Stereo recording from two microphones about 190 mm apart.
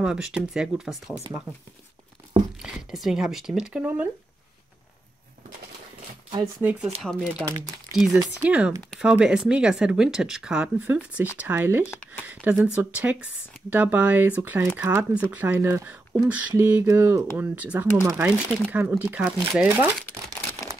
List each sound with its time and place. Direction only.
0.0 s speech: 5° right (ahead or behind)
2.6 s speech: centre (ahead or behind)
6.6 s speech: 5° right (ahead or behind)
7.4 s speech: 20° right (ahead or behind)
7.9 s speech: centre (ahead or behind)